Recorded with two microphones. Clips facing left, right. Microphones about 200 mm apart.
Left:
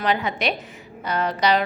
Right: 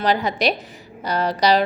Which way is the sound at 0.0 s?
35° right (ahead or behind).